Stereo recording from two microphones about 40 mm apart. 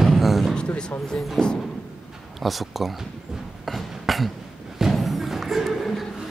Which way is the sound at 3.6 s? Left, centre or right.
Centre.